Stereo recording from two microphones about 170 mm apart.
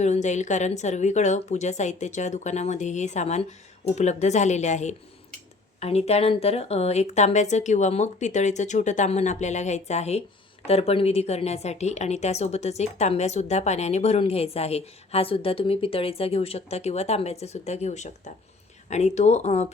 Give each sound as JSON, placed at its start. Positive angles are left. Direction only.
{"t": 0.0, "sound": "a woman's voice", "side_deg": 45}